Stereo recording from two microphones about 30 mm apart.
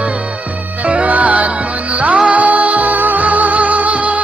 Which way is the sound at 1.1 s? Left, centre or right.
Right.